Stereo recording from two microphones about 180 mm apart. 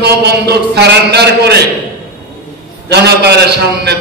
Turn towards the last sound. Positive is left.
turn(degrees=-65)  # may be behind; listen again after turning